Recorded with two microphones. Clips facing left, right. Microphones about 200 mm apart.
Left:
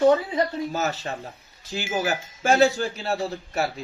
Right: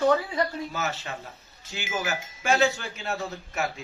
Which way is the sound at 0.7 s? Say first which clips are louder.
Left 5 dB; 40° left (ahead or behind).